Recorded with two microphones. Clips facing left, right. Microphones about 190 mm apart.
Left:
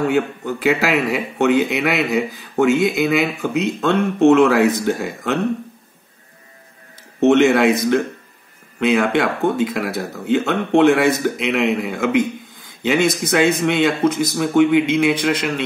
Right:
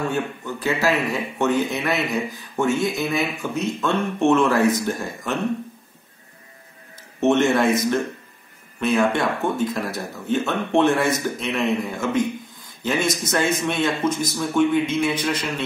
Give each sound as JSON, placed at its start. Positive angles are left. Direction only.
{"t": 0.1, "sound": "speech", "side_deg": 80}
{"t": 7.2, "sound": "speech", "side_deg": 85}
{"t": 8.7, "sound": "speech", "side_deg": 90}